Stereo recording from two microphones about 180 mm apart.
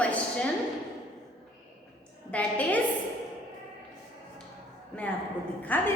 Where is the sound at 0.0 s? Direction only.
5° left (ahead or behind).